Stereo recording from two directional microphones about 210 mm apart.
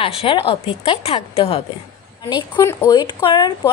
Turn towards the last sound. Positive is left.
turn(degrees=25)  # may be behind; listen again after turning